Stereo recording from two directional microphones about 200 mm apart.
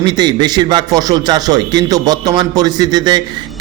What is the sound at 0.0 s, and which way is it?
A man's voice, 20° right (ahead or behind).